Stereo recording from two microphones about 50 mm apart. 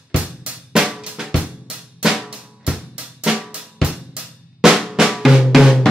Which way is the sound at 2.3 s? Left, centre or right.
Centre.